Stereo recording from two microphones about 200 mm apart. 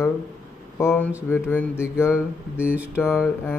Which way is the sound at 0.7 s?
10° left (ahead or behind).